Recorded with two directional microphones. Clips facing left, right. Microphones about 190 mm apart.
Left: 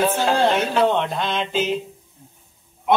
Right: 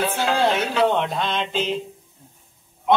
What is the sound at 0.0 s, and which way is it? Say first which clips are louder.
Speech: left 2 dB; 40° left (ahead or behind).